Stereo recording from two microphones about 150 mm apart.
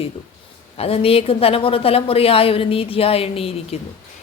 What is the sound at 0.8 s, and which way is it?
A woman's voice, 40° left (ahead or behind).